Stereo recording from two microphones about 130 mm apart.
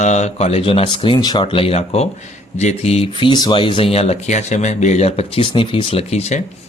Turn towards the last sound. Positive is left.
turn(degrees=55)  # may be behind; listen again after turning